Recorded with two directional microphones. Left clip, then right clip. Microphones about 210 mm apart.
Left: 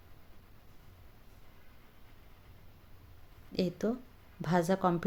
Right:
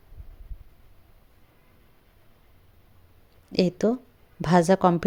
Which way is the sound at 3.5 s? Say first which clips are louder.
Right 10 dB; 35° right (ahead or behind).